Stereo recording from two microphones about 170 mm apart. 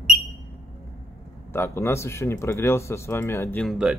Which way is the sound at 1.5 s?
15° left (ahead or behind).